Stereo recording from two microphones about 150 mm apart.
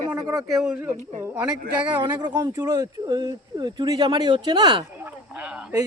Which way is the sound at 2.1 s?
25° right (ahead or behind).